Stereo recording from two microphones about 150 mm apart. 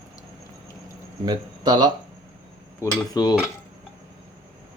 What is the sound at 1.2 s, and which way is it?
Speech, 30° right (ahead or behind).